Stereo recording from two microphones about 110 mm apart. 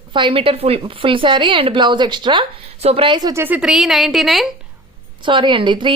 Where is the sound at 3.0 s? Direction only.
45° right (ahead or behind).